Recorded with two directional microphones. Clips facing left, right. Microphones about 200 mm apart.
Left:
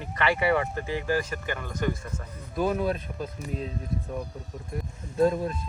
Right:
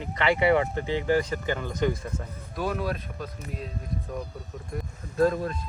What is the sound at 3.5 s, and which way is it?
Speech, centre (ahead or behind).